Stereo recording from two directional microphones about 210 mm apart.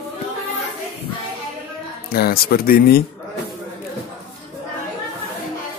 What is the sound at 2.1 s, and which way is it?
Speech, 45° left (ahead or behind).